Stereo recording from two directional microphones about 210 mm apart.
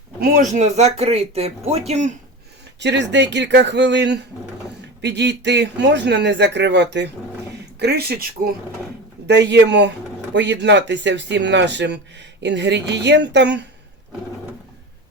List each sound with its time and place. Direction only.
0.2 s speech: 35° right (ahead or behind)
2.8 s a man's voice: 55° right (ahead or behind)